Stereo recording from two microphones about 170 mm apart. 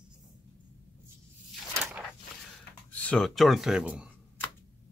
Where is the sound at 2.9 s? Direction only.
5° left (ahead or behind).